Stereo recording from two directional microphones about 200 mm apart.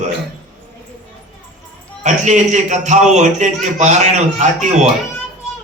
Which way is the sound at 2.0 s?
35° right (ahead or behind).